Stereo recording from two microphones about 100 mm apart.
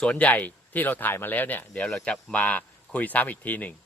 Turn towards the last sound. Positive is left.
turn(degrees=15)  # may be behind; listen again after turning